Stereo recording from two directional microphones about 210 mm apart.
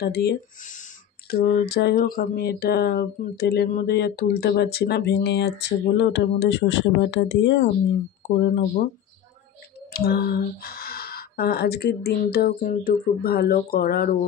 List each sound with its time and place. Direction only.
0.0 s speech: 50° left (ahead or behind)
9.9 s speech: 50° left (ahead or behind)